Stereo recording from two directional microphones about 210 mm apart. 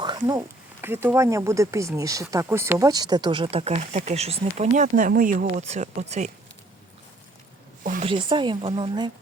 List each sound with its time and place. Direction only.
0.0 s speech: 20° right (ahead or behind)
8.0 s speech: 25° right (ahead or behind)